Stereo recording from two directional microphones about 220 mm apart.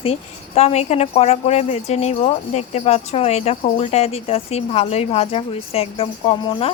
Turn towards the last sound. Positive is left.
turn(degrees=25)  # may be behind; listen again after turning